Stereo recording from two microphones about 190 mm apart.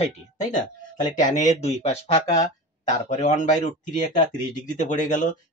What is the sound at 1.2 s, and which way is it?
Speech, 35° left (ahead or behind).